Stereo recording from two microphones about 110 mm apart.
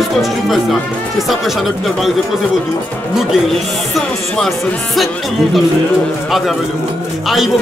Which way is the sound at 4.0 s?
Centre (ahead or behind).